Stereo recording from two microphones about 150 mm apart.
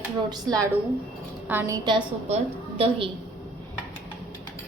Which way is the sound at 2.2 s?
40° right (ahead or behind).